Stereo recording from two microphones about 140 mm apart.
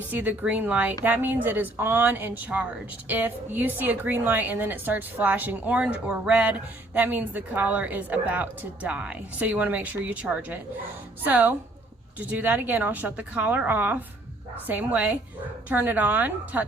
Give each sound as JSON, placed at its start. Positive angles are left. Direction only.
{"t": 0.1, "sound": "speech", "side_deg": -10}